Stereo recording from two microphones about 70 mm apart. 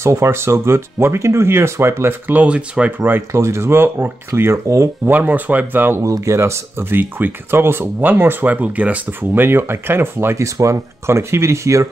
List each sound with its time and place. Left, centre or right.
0.0 s speech: right; by 2.9 s centre
3.3 s speech: right
4.4 s speech: right
5.0 s speech: right
6.2 s speech: right